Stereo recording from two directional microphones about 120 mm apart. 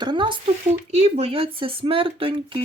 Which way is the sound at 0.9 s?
65° right (ahead or behind).